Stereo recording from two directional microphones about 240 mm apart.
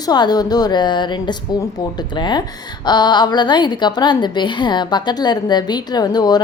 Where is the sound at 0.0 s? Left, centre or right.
Centre.